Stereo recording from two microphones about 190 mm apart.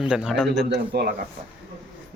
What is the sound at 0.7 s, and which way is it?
Speech, 55° right (ahead or behind).